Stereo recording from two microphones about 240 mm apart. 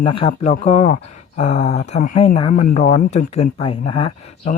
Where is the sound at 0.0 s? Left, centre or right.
Left.